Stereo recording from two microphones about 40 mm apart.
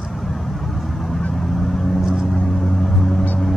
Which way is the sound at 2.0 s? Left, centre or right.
Centre.